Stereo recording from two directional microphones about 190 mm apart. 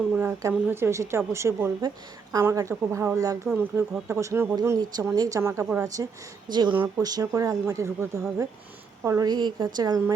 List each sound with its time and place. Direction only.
0.1 s a woman's voice: 10° right (ahead or behind)